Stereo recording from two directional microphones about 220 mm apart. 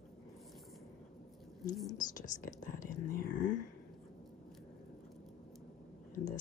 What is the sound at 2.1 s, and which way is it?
Speech, 35° left (ahead or behind).